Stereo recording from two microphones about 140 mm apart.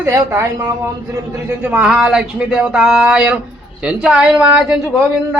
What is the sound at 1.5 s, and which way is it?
Speech, 10° right (ahead or behind).